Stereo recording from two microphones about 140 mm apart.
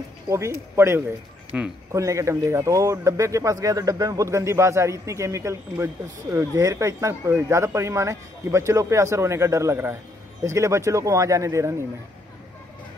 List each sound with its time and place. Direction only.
0.3 s speech: 20° right (ahead or behind)